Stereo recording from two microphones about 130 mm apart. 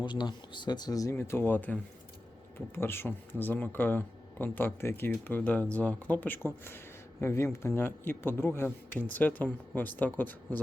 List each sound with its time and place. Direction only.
0.0 s speech: 35° left (ahead or behind)
1.1 s speech: 15° left (ahead or behind)